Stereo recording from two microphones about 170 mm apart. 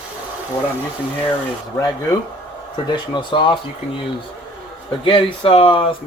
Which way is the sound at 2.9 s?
30° left (ahead or behind).